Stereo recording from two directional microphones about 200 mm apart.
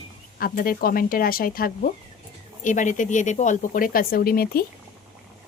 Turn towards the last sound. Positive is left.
turn(degrees=50)  # may be behind; listen again after turning